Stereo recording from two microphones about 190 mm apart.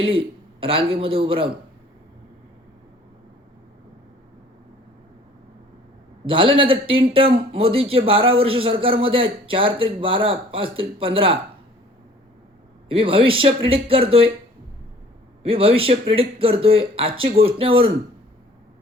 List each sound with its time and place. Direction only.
0.0 s a man's voice: 30° right (ahead or behind)
6.2 s a man's voice: 25° right (ahead or behind)
12.9 s a man's voice: 30° right (ahead or behind)
15.4 s a man's voice: 30° right (ahead or behind)